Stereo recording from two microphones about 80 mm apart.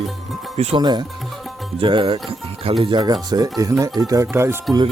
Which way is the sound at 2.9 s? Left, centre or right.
Right.